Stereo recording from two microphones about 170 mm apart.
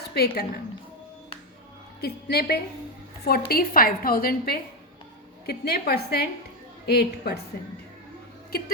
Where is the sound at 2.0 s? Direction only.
70° left (ahead or behind).